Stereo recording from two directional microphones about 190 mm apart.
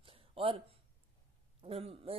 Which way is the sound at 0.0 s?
30° right (ahead or behind).